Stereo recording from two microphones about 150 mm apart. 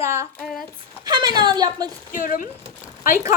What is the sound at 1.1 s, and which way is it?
Speech, 30° right (ahead or behind).